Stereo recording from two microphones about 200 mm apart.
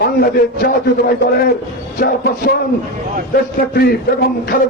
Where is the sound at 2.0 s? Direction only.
50° left (ahead or behind).